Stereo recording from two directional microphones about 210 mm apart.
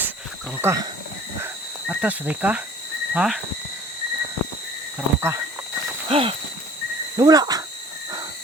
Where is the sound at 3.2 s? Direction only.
5° right (ahead or behind).